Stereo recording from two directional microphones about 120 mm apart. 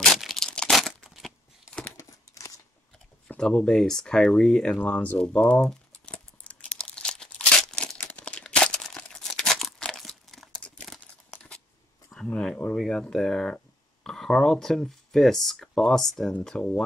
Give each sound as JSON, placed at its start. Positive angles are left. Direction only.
{"t": 0.0, "sound": "tearing", "side_deg": 0}
{"t": 2.0, "sound": "crumpling", "side_deg": 25}
{"t": 3.3, "sound": "speech", "side_deg": 10}
{"t": 5.7, "sound": "crumpling", "side_deg": 10}
{"t": 11.2, "sound": "a sound", "side_deg": 10}
{"t": 14.0, "sound": "speech", "side_deg": 5}